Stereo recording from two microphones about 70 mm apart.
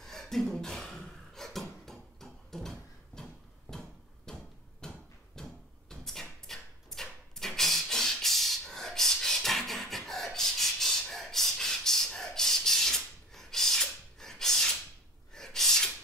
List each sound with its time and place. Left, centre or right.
0.0 s beatboxing: centre
3.7 s hammer: centre
4.8 s a sound: centre
15.3 s gasp: centre